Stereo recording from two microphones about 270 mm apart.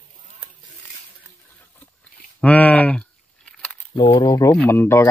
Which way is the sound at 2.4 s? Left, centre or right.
Centre.